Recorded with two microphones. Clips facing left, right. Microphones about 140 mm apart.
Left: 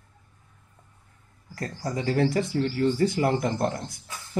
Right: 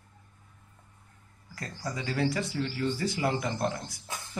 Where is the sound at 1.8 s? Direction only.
45° left (ahead or behind).